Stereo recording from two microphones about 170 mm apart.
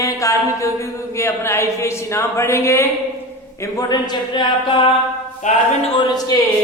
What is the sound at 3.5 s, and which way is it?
A man's voice, 20° left (ahead or behind).